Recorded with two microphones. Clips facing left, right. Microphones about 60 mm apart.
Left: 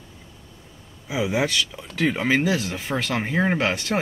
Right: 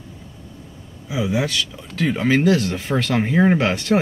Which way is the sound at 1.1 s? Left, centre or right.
Centre.